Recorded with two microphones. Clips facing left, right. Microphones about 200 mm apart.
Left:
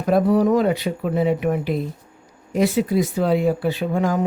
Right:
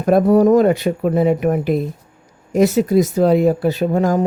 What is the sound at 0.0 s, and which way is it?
Speech, 50° right (ahead or behind).